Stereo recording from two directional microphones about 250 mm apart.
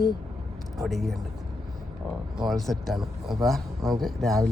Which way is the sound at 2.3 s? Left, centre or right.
Centre.